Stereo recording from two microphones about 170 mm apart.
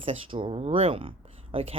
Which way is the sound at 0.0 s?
30° right (ahead or behind).